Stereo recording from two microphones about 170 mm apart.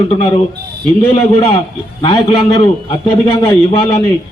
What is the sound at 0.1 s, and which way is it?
Speech, 30° left (ahead or behind).